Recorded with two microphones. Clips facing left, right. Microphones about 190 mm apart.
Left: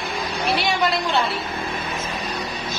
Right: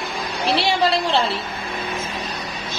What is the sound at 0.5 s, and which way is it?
Speech, 30° right (ahead or behind).